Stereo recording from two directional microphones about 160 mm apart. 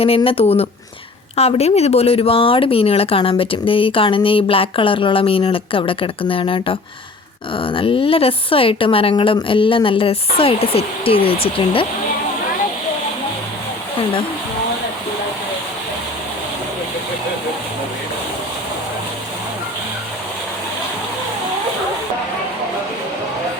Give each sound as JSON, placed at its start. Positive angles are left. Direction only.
{"t": 0.2, "sound": "speech", "side_deg": 35}